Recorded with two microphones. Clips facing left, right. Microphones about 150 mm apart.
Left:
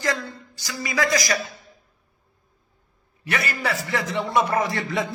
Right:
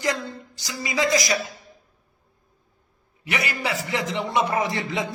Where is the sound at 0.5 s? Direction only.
20° right (ahead or behind).